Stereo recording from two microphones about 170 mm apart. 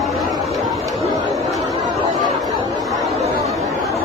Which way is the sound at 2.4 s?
Centre (ahead or behind).